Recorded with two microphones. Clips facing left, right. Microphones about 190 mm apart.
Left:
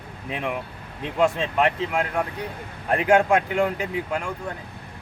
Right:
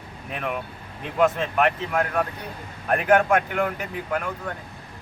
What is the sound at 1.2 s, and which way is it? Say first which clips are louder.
Speech: even; 15° left (ahead or behind).